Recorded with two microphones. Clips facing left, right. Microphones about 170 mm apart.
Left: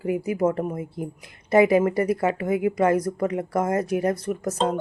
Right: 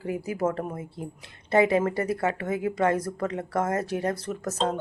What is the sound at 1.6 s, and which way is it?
Speech, 25° right (ahead or behind).